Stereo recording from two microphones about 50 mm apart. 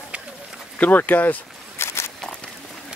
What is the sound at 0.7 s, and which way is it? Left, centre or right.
Speech, left.